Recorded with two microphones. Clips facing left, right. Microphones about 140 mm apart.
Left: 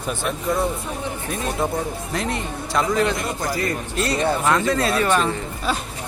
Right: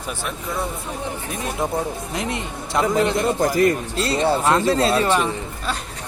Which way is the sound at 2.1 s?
20° right (ahead or behind).